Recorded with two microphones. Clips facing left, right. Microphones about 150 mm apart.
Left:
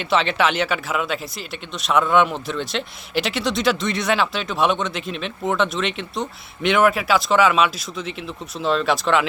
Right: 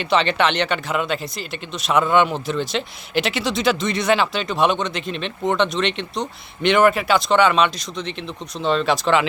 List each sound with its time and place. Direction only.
0.0 s speech: centre (ahead or behind)